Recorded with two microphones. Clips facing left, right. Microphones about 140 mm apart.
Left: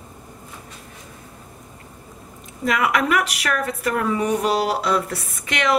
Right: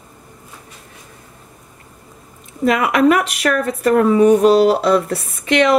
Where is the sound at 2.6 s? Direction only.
25° right (ahead or behind).